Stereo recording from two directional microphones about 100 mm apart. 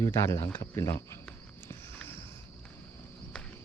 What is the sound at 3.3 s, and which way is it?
Cricket, 5° left (ahead or behind).